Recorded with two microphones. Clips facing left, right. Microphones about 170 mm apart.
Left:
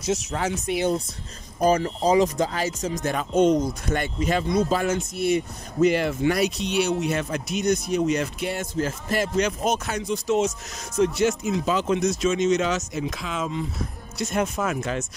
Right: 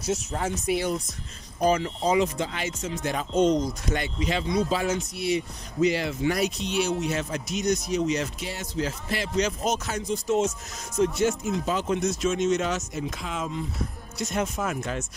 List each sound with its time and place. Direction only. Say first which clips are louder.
0.0 s speech: left 2 dB; 85° left
0.7 s speech: left 4 dB; 30° left (ahead or behind)
1.6 s speech: left 3 dB; 40° left (ahead or behind)
3.2 s speech: left 3 dB; 60° left (ahead or behind)
9.4 s speech: left 2 dB; 60° left (ahead or behind); by 13.5 s 90° left
14.1 s speech: left 3 dB; 70° left (ahead or behind); by 15.0 s 90° left